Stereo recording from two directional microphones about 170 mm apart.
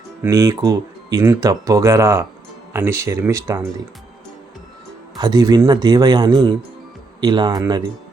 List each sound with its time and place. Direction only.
0.2 s speech: 20° right (ahead or behind)
5.1 s speech: 25° right (ahead or behind)